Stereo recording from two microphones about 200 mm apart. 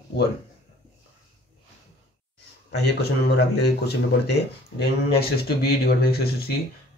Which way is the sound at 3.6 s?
55° left (ahead or behind).